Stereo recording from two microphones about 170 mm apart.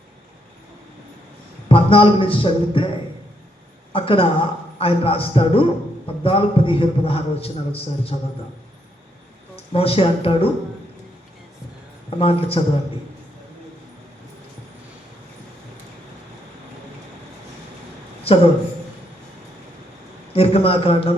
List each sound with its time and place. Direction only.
1.6 s a man's voice: 30° left (ahead or behind)
3.9 s a man's voice: 30° left (ahead or behind)
9.7 s a man's voice: 35° left (ahead or behind)
12.2 s a man's voice: 35° left (ahead or behind)
18.2 s a sound: 35° left (ahead or behind)
20.3 s a man's voice: 35° left (ahead or behind)